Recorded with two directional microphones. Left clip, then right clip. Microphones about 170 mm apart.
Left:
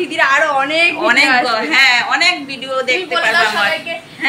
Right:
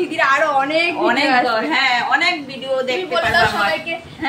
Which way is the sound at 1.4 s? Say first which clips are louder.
Left 4 dB; 25° right (ahead or behind).